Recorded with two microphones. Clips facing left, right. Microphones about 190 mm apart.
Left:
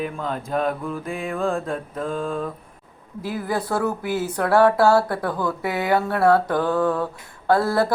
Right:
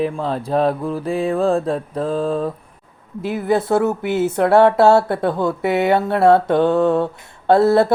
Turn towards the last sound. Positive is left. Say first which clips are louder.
# right 6 dB
turn(degrees=-25)  # may be behind; listen again after turning